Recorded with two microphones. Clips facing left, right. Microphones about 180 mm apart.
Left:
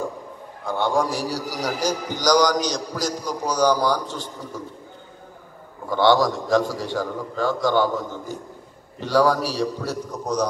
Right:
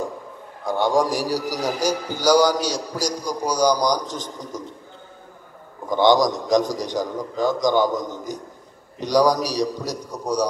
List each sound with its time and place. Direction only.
0.7 s a man's voice: 15° right (ahead or behind)
5.9 s a man's voice: 15° right (ahead or behind)